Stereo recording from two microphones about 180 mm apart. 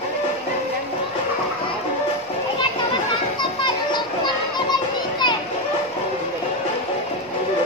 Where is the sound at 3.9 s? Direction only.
25° left (ahead or behind).